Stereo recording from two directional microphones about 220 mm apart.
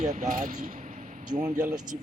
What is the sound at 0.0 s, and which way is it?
Speech, 35° right (ahead or behind).